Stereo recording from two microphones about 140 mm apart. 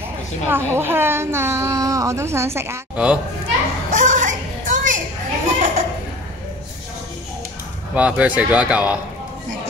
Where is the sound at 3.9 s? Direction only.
60° right (ahead or behind).